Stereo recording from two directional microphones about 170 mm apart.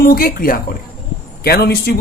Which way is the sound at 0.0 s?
60° left (ahead or behind).